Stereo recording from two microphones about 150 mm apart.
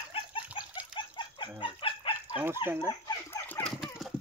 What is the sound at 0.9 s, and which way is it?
Chicken, 30° left (ahead or behind).